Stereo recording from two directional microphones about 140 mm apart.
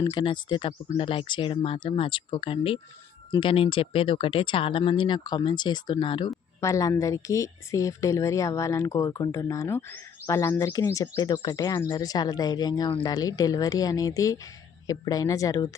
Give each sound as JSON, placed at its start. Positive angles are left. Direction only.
{"t": 0.0, "sound": "speech", "side_deg": 40}
{"t": 6.6, "sound": "speech", "side_deg": 20}